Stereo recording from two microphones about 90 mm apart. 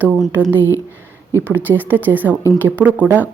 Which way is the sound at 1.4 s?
20° right (ahead or behind).